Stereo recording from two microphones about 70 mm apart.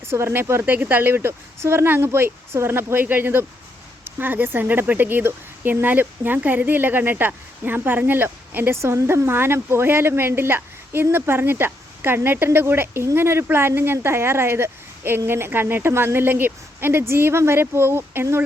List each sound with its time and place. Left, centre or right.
0.0 s speech: right
0.6 s speech: right
8.8 s speech: right